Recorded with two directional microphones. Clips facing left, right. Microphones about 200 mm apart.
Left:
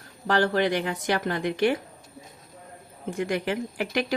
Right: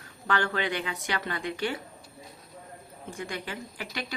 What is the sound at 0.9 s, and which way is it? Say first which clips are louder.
Speech: left 6 dB; 45° left (ahead or behind).